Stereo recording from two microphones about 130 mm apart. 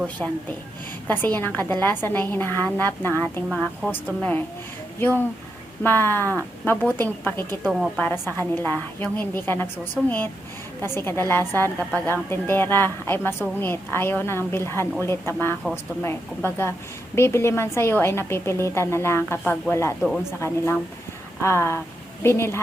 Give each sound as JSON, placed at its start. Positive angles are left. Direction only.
{"t": 1.0, "sound": "a woman's voice", "side_deg": 15}
{"t": 3.5, "sound": "speech", "side_deg": 0}
{"t": 3.9, "sound": "a woman's voice", "side_deg": 15}
{"t": 7.6, "sound": "speech", "side_deg": -5}
{"t": 7.9, "sound": "a woman's voice", "side_deg": 15}
{"t": 21.4, "sound": "a woman's voice", "side_deg": 20}